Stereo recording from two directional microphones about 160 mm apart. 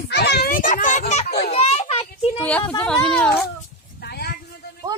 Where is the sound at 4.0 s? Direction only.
85° left.